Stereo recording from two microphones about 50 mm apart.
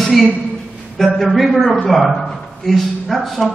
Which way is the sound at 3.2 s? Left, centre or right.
Centre.